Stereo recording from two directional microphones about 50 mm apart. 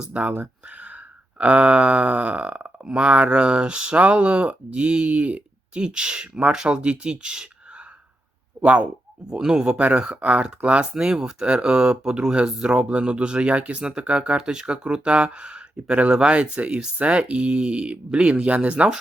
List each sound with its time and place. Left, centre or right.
0.1 s speech: right
1.4 s speech: right
8.6 s speech: right